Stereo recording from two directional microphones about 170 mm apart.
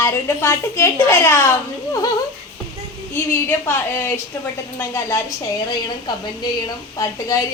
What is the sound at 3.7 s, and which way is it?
A child's voice, 15° left (ahead or behind).